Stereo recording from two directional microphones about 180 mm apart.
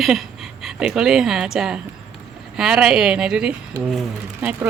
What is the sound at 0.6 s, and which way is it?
A woman's voice, 5° right (ahead or behind).